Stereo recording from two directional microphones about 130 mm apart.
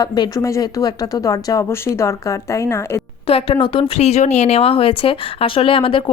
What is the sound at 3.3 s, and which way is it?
Speech, 45° left (ahead or behind).